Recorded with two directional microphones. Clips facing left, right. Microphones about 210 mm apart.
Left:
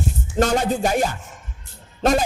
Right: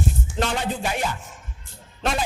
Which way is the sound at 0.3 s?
45° left (ahead or behind).